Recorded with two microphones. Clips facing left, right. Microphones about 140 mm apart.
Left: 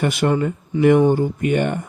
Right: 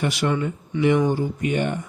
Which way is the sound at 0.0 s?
50° left (ahead or behind).